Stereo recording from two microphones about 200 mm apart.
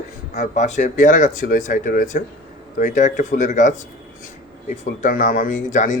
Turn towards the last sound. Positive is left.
turn(degrees=40)  # may be behind; listen again after turning